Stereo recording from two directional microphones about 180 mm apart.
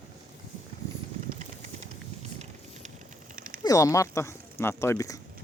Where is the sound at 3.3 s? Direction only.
50° right (ahead or behind).